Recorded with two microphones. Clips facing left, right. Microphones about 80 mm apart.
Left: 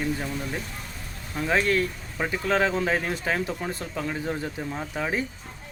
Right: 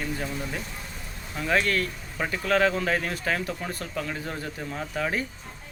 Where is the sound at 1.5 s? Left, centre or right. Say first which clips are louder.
Left 1 dB; left.